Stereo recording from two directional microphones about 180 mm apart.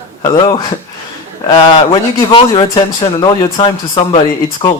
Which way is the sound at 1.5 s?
30° left (ahead or behind).